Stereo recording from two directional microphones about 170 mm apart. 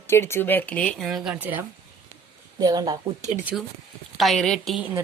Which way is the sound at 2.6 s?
25° right (ahead or behind).